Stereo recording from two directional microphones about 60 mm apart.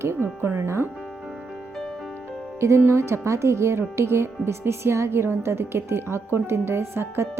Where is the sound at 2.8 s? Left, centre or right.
Right.